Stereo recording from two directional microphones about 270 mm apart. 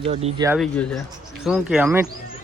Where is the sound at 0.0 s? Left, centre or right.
Right.